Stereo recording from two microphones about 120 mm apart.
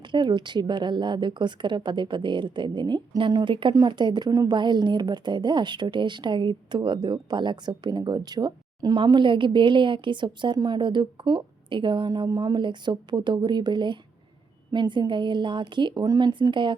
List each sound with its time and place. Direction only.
0.1 s speech: 40° right (ahead or behind)